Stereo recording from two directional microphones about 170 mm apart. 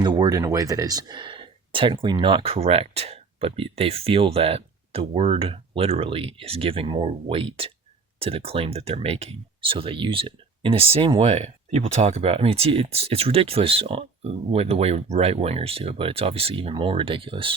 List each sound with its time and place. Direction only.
0.0 s speech: 25° right (ahead or behind)